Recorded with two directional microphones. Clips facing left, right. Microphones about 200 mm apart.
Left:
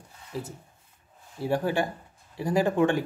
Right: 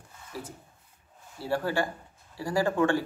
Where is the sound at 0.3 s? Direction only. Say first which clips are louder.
Left 5 dB; 20° left (ahead or behind).